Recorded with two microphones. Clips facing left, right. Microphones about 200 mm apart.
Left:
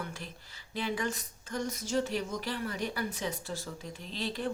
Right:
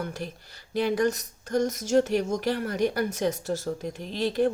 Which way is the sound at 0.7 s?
40° right (ahead or behind).